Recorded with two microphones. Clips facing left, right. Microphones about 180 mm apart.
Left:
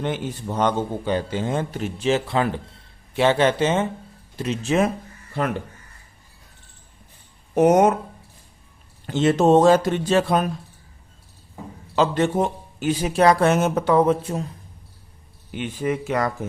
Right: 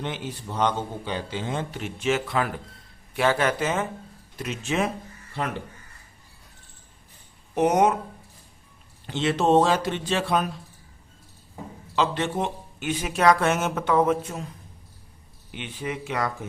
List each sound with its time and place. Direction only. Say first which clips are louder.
0.0 s a man's voice: left 6 dB; 50° left (ahead or behind)
7.5 s a man's voice: left 5 dB; 45° left (ahead or behind)
9.0 s a man's voice: left 5 dB; 45° left (ahead or behind)
11.9 s a man's voice: left 5 dB; 45° left (ahead or behind)
15.5 s a man's voice: left 7 dB; 45° left (ahead or behind)